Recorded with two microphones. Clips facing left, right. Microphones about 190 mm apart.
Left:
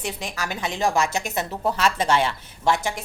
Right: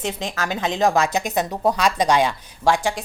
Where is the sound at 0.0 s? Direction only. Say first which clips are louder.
Right 4 dB; 20° right (ahead or behind).